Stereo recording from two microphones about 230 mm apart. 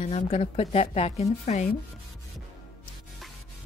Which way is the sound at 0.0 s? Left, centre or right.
Left.